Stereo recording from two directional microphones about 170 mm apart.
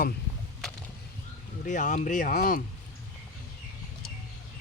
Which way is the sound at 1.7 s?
45° left (ahead or behind).